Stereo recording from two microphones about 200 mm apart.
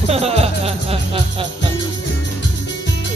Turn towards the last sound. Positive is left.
turn(degrees=-30)  # may be behind; listen again after turning